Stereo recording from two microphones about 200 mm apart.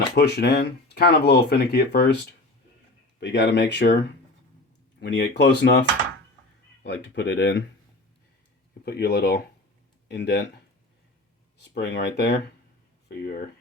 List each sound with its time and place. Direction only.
0.1 s speech: 55° left (ahead or behind)
3.2 s speech: 60° left (ahead or behind)
6.8 s speech: 60° left (ahead or behind)
8.8 s speech: 50° left (ahead or behind)
11.5 s speech: 55° left (ahead or behind)